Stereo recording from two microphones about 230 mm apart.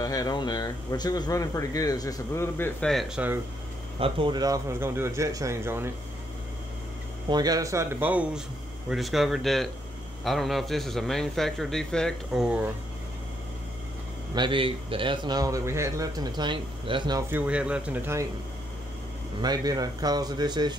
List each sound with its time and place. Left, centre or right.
0.0 s speech: centre
4.0 s speech: right
7.2 s a man's voice: centre
14.3 s a man's voice: right
17.4 s a man's voice: centre
19.4 s speech: centre